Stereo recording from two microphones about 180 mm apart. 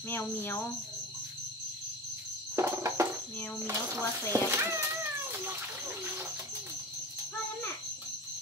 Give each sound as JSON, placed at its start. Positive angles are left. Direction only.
{"t": 0.1, "sound": "cricket", "side_deg": 10}
{"t": 2.5, "sound": "music", "side_deg": -15}
{"t": 3.6, "sound": "speech", "side_deg": -15}